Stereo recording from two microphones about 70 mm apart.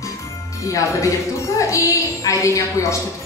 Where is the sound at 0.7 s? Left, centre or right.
Left.